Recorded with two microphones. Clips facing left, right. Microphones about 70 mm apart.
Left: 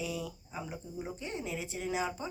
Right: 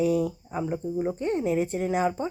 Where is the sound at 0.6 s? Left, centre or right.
Right.